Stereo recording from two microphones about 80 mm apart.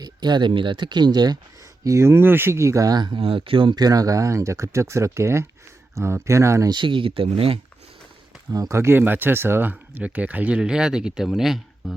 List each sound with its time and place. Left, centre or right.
0.0 s speech: right
1.8 s speech: right
2.9 s speech: right
3.8 s speech: right
6.7 s speech: right
8.5 s speech: right; by 11.9 s centre